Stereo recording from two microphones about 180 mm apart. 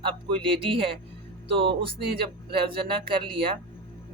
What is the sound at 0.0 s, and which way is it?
Speech, 30° right (ahead or behind).